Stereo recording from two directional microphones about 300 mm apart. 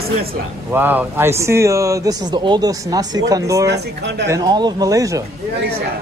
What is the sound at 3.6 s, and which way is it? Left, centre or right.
Speech, right.